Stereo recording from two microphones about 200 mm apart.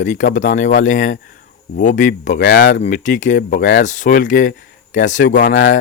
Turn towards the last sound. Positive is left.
turn(degrees=60)  # may be behind; listen again after turning